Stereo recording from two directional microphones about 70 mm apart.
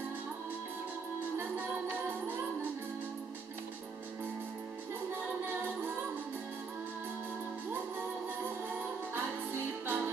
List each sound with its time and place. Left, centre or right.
1.3 s music: right
5.1 s music: right
8.7 s music: right